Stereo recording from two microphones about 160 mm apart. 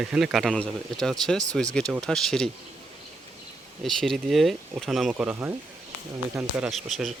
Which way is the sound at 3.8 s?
Centre (ahead or behind).